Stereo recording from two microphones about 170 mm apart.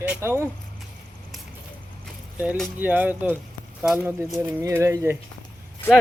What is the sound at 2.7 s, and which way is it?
Speech, 10° right (ahead or behind).